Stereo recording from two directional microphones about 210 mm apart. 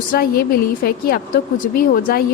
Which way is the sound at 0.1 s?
45° left (ahead or behind).